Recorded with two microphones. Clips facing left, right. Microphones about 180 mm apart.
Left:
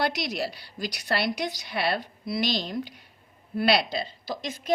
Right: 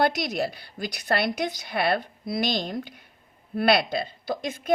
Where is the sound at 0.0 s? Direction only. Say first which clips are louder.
Right 4 dB; 50° right (ahead or behind).